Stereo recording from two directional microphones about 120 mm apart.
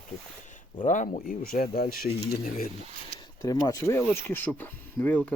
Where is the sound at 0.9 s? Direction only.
90° left.